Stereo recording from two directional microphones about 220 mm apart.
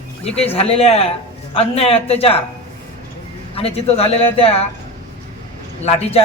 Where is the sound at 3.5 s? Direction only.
25° left (ahead or behind).